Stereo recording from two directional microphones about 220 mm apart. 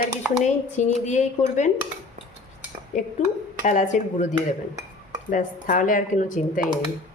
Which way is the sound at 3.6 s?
35° left (ahead or behind).